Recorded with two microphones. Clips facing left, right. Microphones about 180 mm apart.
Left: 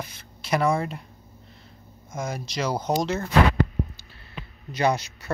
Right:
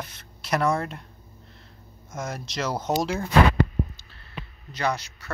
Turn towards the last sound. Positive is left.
turn(degrees=15)  # may be behind; listen again after turning